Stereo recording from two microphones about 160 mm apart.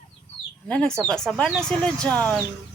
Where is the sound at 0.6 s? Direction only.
5° left (ahead or behind).